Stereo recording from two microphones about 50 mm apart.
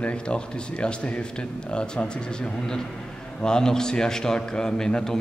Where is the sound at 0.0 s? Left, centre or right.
Left.